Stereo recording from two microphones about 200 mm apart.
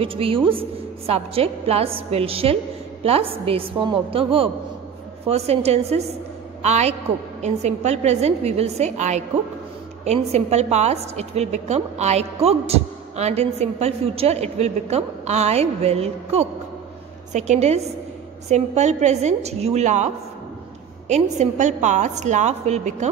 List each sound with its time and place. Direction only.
0.0 s a woman's voice: 25° right (ahead or behind)
21.1 s a woman's voice: 35° right (ahead or behind)